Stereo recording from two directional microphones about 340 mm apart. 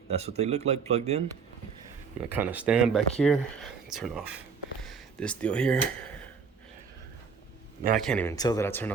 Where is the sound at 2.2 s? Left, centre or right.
Centre.